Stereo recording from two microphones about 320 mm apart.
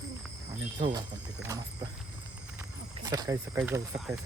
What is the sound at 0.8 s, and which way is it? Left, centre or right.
Speech, centre.